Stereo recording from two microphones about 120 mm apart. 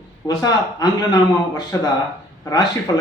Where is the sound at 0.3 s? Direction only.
30° left (ahead or behind).